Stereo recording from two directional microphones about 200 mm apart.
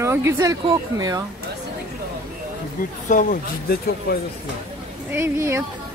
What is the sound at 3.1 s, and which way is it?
Speech, 40° left (ahead or behind).